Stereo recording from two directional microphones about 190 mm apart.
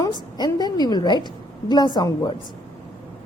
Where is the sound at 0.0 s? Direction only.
20° left (ahead or behind).